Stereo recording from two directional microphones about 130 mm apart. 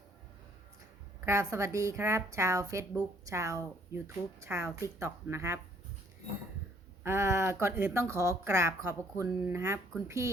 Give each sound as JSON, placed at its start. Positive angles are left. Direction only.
{"t": 1.2, "sound": "a woman's voice", "side_deg": -25}
{"t": 7.0, "sound": "a woman's voice", "side_deg": -20}